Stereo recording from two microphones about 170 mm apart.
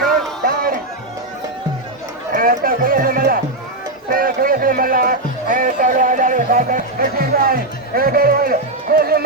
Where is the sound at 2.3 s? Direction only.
55° right (ahead or behind).